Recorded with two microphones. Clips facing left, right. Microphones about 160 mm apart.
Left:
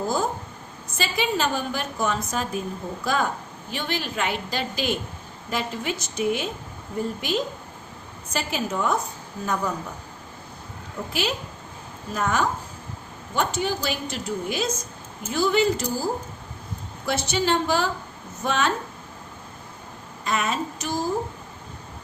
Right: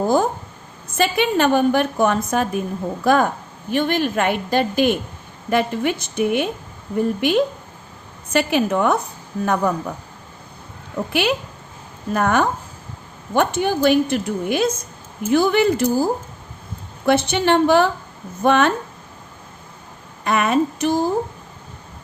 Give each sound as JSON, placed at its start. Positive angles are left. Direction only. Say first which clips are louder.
{"t": 0.9, "sound": "a woman's voice", "louder": "right 7 dB", "side_deg": -60}
{"t": 10.9, "sound": "a woman's voice", "louder": "right 8 dB", "side_deg": -65}
{"t": 17.1, "sound": "a woman's voice", "louder": "right 7 dB", "side_deg": -60}
{"t": 20.2, "sound": "a woman's voice", "louder": "right 8 dB", "side_deg": -60}